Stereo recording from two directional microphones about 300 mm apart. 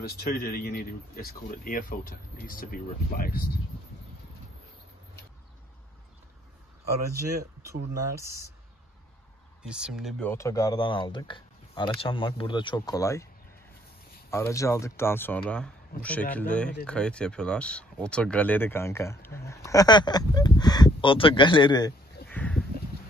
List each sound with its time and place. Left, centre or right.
0.3 s a man's voice: left
7.9 s speech: centre
9.6 s speech: centre
14.3 s speech: centre
22.3 s a sound: centre